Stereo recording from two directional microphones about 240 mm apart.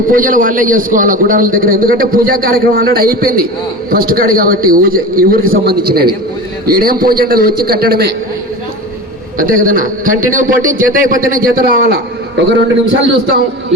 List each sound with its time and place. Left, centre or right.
0.1 s a man's voice: right
6.7 s a man's voice: right
9.4 s a man's voice: right